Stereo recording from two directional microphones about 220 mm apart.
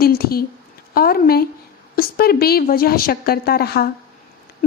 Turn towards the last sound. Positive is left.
turn(degrees=45)  # may be behind; listen again after turning